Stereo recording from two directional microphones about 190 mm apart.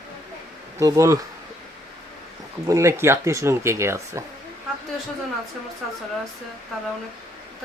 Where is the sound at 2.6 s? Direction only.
15° right (ahead or behind).